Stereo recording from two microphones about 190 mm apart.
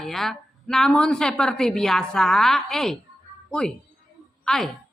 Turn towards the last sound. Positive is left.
turn(degrees=0)  # may be behind; listen again after turning